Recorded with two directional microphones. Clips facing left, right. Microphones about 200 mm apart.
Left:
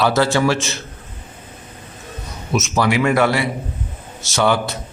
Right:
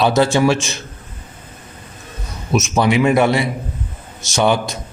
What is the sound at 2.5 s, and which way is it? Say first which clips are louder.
A man's voice: right 2 dB; 20° right (ahead or behind).